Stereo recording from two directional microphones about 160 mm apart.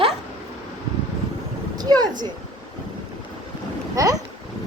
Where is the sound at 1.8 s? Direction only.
25° right (ahead or behind).